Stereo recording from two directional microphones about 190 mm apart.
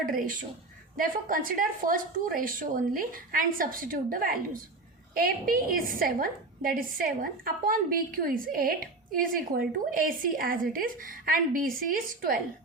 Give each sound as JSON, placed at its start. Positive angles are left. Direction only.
{"t": 0.1, "sound": "a woman's voice", "side_deg": -45}